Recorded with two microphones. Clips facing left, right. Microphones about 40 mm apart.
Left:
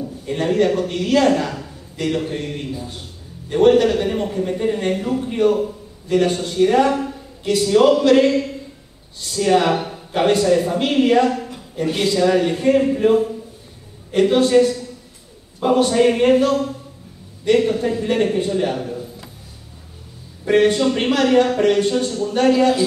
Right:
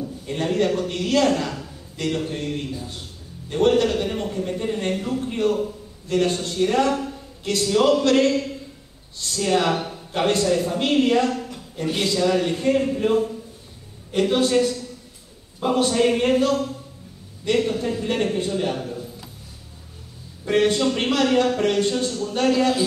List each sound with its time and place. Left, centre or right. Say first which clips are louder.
0.0 s a man's voice: left 4 dB; centre
20.4 s speech: left 4 dB; centre